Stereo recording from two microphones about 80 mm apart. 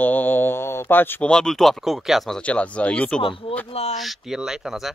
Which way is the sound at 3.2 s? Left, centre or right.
Left.